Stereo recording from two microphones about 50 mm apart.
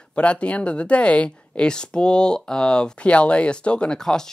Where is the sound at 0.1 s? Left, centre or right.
Left.